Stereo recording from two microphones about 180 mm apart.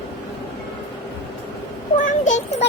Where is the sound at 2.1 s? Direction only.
45° left (ahead or behind).